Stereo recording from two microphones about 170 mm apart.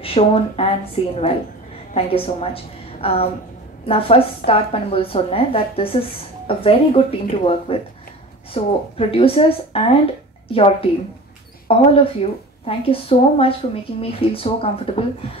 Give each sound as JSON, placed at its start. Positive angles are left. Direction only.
{"t": 0.0, "sound": "a woman's voice", "side_deg": 35}